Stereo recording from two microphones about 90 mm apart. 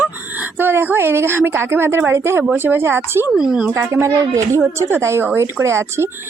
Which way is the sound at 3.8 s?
30° right (ahead or behind).